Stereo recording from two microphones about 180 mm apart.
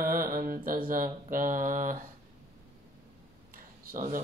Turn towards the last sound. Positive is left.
turn(degrees=-45)  # may be behind; listen again after turning